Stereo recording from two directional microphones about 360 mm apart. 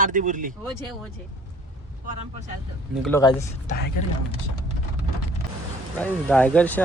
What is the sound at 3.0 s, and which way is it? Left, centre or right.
Speech, centre.